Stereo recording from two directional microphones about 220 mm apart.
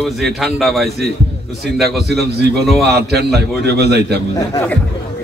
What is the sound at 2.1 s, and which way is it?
A man's voice, 45° right (ahead or behind).